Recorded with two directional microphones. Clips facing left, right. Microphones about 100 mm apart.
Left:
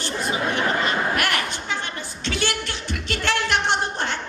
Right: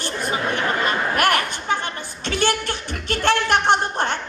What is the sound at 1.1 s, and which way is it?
Speech, 50° right (ahead or behind).